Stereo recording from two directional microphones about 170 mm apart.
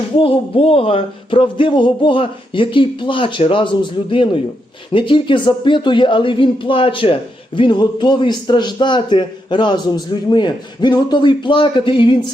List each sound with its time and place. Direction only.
0.2 s speech: 35° left (ahead or behind)